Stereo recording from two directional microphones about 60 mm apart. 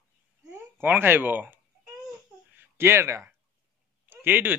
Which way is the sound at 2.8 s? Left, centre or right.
Right.